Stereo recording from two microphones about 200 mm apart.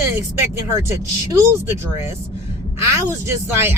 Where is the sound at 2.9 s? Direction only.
10° right (ahead or behind).